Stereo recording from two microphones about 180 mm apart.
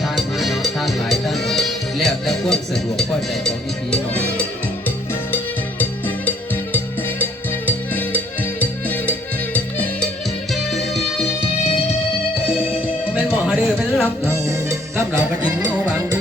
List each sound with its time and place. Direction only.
0.0 s music: centre (ahead or behind)
5.8 s music: 10° left (ahead or behind)
7.9 s music: 10° left (ahead or behind)
13.1 s music: 5° right (ahead or behind)
14.3 s music: 15° right (ahead or behind)